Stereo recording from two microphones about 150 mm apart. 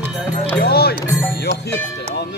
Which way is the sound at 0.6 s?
90° left.